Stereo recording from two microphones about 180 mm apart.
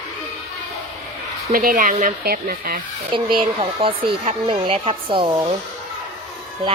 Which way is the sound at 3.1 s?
25° right (ahead or behind).